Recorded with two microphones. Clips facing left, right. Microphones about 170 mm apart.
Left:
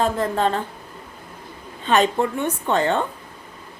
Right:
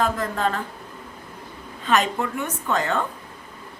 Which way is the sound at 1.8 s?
30° left (ahead or behind).